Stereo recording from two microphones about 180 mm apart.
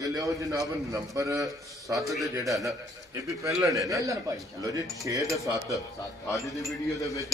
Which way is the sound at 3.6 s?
20° right (ahead or behind).